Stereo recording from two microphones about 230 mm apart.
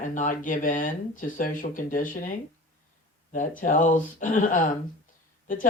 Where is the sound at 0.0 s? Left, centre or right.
Left.